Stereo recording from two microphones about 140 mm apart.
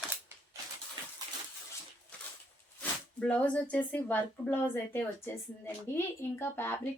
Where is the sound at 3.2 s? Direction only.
10° left (ahead or behind).